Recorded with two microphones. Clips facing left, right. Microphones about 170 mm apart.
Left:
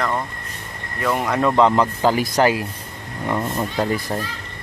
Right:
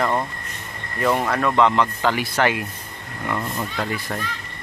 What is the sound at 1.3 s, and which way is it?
Speech, 15° left (ahead or behind).